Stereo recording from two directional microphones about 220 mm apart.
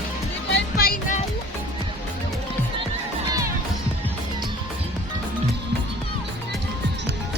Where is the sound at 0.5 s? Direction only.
40° left (ahead or behind).